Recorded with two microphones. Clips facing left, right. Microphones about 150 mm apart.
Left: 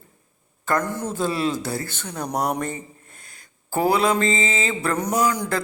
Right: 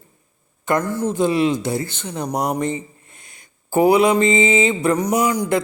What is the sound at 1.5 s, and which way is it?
Mantra, 20° right (ahead or behind).